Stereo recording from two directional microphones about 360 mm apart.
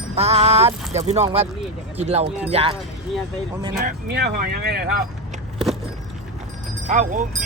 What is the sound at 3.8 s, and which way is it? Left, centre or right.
Speech, right.